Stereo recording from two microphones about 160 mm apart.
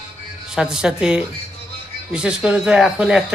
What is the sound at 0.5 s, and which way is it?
Speech, 5° right (ahead or behind).